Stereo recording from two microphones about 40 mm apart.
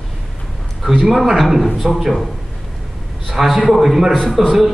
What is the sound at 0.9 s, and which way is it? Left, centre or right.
A man's voice, centre.